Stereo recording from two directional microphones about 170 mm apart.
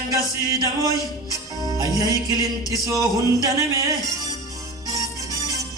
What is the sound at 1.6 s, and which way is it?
Speech, 20° right (ahead or behind).